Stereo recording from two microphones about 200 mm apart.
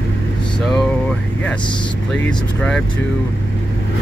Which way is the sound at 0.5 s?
5° left (ahead or behind).